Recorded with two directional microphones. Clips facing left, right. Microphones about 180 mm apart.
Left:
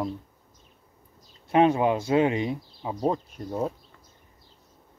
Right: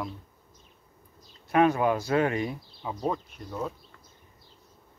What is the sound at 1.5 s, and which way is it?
Speech, 25° left (ahead or behind).